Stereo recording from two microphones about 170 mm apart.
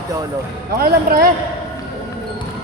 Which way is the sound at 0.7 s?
65° right (ahead or behind).